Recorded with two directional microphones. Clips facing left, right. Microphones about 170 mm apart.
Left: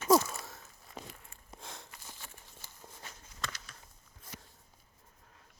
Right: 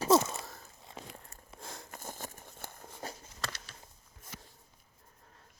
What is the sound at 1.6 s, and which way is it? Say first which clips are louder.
Sniff: right 2 dB; centre (ahead or behind).